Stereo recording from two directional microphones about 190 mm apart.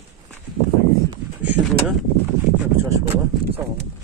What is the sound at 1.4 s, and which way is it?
Speech, 5° right (ahead or behind).